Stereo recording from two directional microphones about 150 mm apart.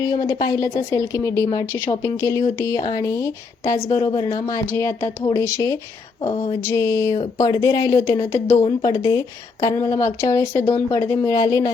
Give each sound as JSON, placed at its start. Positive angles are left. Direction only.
{"t": 0.0, "sound": "a woman's voice", "side_deg": 25}